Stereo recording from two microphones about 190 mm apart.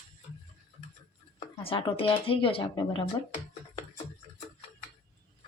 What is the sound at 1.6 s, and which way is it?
Speech, 30° left (ahead or behind).